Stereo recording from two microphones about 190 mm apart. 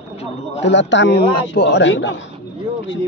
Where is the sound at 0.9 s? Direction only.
65° left (ahead or behind).